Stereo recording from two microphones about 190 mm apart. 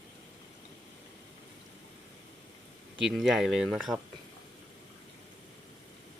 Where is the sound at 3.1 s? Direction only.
Centre (ahead or behind).